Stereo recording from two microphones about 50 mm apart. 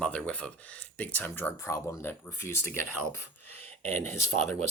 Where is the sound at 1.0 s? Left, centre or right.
Left.